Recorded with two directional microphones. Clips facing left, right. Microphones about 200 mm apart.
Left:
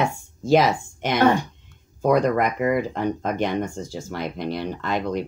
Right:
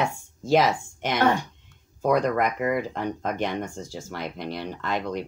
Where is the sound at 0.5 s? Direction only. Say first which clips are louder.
Left 3 dB; 15° left (ahead or behind).